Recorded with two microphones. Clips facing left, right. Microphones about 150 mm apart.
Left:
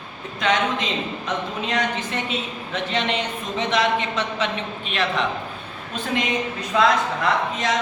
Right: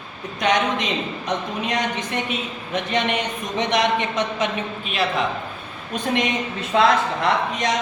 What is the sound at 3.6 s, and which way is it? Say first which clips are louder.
Speech: right 1 dB; 15° right (ahead or behind).